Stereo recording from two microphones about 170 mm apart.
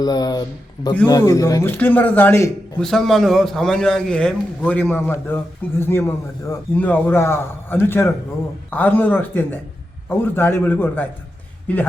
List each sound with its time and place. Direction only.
0.0 s a man's voice: 25° left (ahead or behind)
2.8 s a man's voice: centre (ahead or behind)